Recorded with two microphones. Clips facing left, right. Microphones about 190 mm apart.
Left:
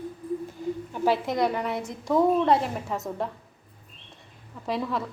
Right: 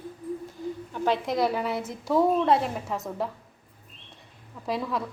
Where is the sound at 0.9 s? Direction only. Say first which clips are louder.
Left 1 dB; 5° left (ahead or behind).